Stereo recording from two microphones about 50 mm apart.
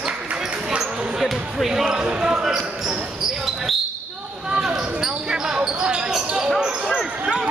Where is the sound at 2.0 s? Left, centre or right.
Centre.